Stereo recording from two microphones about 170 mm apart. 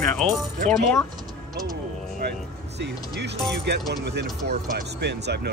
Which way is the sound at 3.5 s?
70° right (ahead or behind).